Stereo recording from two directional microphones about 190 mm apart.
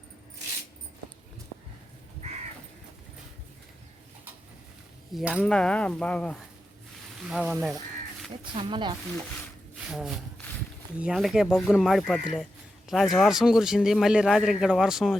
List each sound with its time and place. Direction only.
5.1 s a man's voice: 5° right (ahead or behind)
8.5 s speech: 25° right (ahead or behind)
9.8 s a man's voice: centre (ahead or behind)